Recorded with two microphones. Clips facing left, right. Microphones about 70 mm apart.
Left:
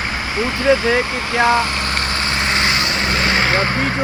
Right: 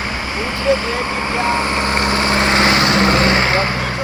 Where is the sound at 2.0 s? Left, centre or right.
Right.